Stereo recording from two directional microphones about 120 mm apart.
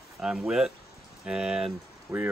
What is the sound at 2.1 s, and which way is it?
Speech, 25° right (ahead or behind).